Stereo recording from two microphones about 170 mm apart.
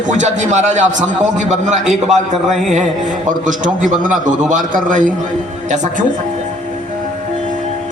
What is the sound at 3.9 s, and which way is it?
A man's voice, 50° right (ahead or behind).